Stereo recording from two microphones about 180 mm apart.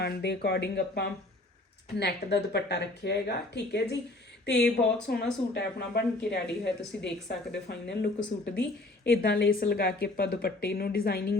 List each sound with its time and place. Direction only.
0.0 s speech: 65° left (ahead or behind)
5.0 s speech: 70° left (ahead or behind)